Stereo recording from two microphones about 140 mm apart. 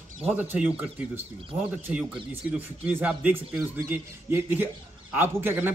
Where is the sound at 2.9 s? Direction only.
10° right (ahead or behind).